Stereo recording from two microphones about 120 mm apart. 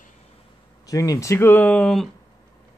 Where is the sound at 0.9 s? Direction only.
30° left (ahead or behind); by 2.1 s 5° left (ahead or behind).